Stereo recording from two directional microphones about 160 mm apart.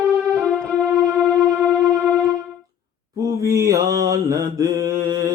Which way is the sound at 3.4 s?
20° right (ahead or behind).